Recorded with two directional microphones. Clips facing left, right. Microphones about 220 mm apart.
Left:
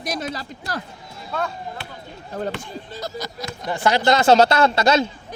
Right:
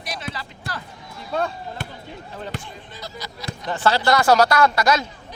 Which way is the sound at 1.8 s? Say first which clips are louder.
Right 3 dB; 45° right (ahead or behind).